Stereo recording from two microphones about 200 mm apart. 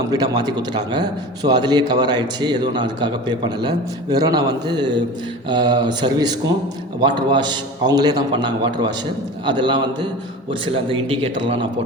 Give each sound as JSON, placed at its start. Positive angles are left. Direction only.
{"t": 0.1, "sound": "a man's voice", "side_deg": -20}